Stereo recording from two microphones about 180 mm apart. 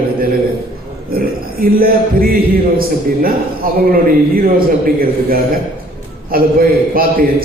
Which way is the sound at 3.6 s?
50° right (ahead or behind).